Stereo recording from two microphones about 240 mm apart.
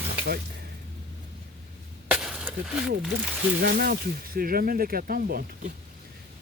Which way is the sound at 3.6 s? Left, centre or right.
Right.